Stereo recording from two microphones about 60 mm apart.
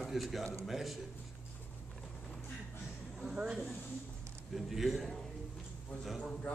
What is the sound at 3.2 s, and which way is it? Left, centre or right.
A man's voice, centre.